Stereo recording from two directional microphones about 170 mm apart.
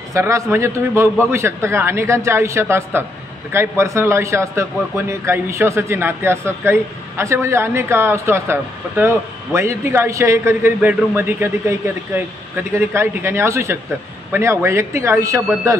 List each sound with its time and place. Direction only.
0.1 s a man's voice: 15° right (ahead or behind)